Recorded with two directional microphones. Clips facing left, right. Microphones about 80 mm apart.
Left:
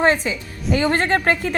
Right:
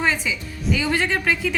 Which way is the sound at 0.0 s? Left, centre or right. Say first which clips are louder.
Left 5 dB; left.